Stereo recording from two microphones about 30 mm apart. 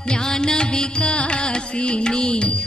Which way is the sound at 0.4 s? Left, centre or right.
Left.